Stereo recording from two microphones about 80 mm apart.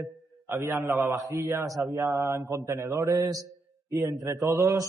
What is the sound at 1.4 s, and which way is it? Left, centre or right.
A man's voice, right.